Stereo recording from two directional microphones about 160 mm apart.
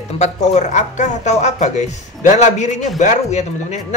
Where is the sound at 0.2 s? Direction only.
45° left (ahead or behind).